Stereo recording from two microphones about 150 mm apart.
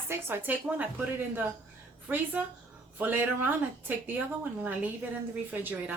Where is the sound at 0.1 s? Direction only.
15° right (ahead or behind).